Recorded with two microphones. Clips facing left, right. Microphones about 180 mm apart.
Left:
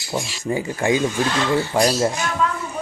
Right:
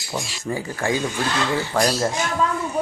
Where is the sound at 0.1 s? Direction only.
15° left (ahead or behind).